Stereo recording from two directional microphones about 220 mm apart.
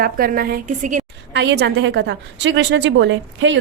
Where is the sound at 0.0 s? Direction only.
40° right (ahead or behind).